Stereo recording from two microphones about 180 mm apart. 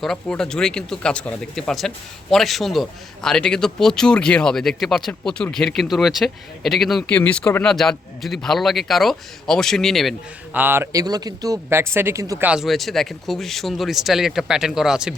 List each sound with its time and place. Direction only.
0.0 s speech: 5° left (ahead or behind)
10.5 s speech: 10° right (ahead or behind)
12.5 s speech: centre (ahead or behind)